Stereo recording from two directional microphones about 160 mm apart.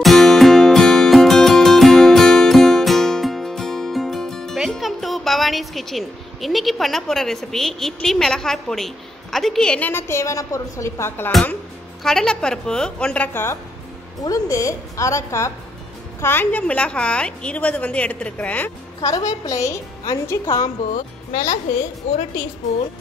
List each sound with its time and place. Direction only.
0.0 s music: centre (ahead or behind)
12.0 s a woman's voice: 5° left (ahead or behind)
19.0 s a woman's voice: 20° left (ahead or behind)
20.9 s speech: 50° left (ahead or behind)